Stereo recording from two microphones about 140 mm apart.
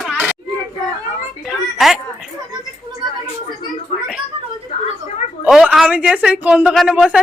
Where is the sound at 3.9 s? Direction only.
60° left (ahead or behind).